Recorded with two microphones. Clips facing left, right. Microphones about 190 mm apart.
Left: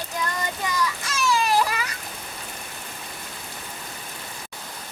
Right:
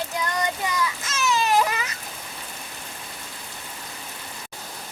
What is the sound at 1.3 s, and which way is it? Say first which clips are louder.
Baby cry: right 1 dB; 20° right (ahead or behind).